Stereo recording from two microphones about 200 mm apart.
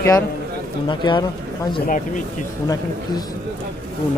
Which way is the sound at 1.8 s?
40° left (ahead or behind).